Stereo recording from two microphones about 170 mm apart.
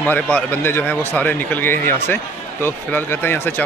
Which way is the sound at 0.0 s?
10° left (ahead or behind).